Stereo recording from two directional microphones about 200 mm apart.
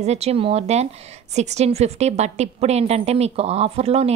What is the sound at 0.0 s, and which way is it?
A woman's voice, 30° right (ahead or behind).